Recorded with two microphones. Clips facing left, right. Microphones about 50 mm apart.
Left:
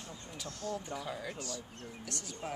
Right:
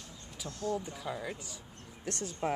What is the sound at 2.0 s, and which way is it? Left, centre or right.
Speech, right.